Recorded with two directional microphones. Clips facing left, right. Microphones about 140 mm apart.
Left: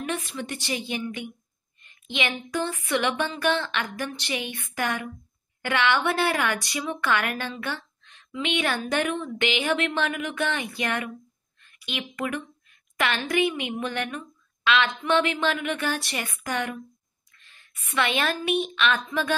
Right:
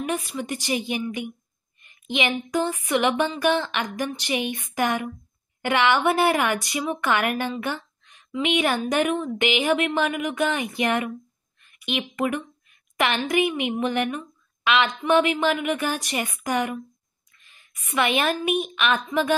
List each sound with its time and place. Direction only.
0.1 s a woman's voice: 10° right (ahead or behind)